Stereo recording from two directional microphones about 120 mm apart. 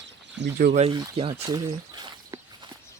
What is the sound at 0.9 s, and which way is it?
Speech, 30° right (ahead or behind).